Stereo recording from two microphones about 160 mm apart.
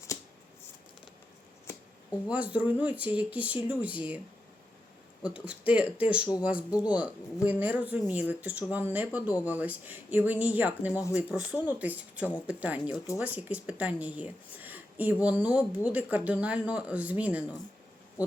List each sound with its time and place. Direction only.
1.6 s a sound: 20° left (ahead or behind)
2.3 s speech: 10° right (ahead or behind)
5.2 s speech: 5° right (ahead or behind)